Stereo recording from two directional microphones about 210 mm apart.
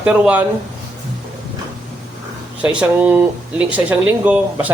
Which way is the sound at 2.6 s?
5° right (ahead or behind).